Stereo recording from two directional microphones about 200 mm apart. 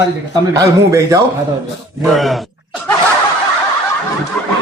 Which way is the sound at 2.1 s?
Centre (ahead or behind).